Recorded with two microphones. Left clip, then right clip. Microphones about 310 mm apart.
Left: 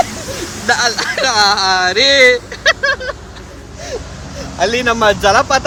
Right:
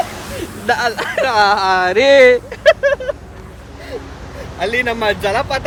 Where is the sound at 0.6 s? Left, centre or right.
Centre.